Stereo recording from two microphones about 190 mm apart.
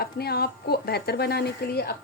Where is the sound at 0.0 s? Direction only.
55° left (ahead or behind).